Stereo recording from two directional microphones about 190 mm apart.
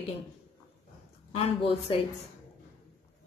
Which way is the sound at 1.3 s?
30° left (ahead or behind).